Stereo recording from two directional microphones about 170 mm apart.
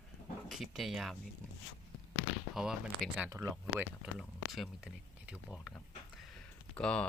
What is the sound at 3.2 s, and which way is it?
Speech, 15° right (ahead or behind).